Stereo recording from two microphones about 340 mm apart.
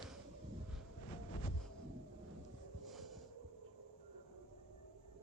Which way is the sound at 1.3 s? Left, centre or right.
Left.